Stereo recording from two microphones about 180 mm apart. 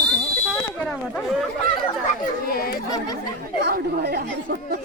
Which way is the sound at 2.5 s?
55° left (ahead or behind).